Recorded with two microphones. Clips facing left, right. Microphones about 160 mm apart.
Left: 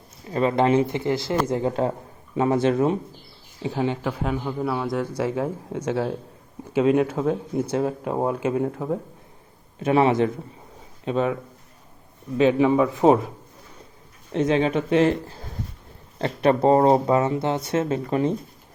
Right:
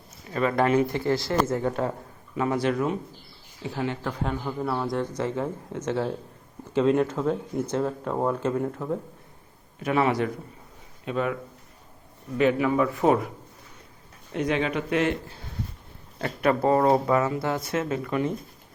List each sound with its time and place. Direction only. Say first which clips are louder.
0.3 s speech: left 3 dB; 25° left (ahead or behind)
4.2 s speech: left 3 dB; 5° left (ahead or behind); by 11.3 s 25° left (ahead or behind)
12.4 s speech: left 4 dB; 25° left (ahead or behind)
14.3 s speech: left 5 dB; 30° left (ahead or behind)